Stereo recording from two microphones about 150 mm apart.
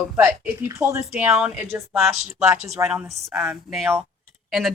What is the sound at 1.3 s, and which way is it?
Speech, 5° right (ahead or behind).